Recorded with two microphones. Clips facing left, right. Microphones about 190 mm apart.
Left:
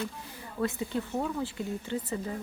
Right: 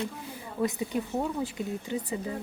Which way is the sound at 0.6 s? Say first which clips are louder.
Right 2 dB; 15° right (ahead or behind).